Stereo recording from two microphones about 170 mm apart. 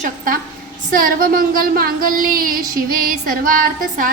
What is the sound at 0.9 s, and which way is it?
A woman's voice, 55° right (ahead or behind).